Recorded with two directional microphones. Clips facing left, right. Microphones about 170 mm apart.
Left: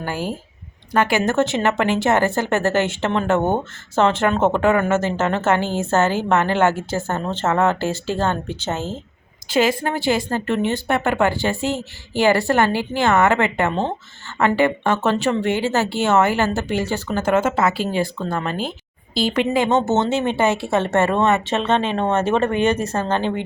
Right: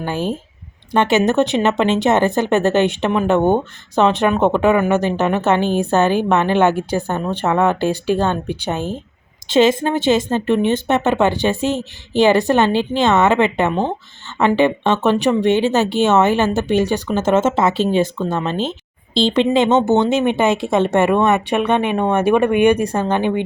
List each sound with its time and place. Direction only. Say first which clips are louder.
0.0 s a woman's voice: right 4 dB; 20° right (ahead or behind)